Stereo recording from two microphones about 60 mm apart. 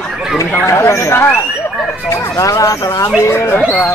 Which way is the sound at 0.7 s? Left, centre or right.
Left.